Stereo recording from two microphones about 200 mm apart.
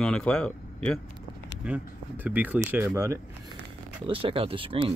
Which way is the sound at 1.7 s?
10° right (ahead or behind).